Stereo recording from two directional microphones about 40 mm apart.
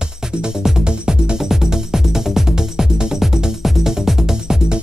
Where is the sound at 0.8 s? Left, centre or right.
Right.